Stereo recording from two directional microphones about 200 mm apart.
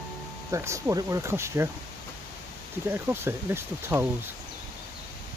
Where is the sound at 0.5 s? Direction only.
15° right (ahead or behind).